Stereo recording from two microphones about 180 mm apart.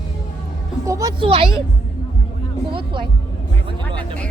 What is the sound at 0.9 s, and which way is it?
Speech, 20° right (ahead or behind).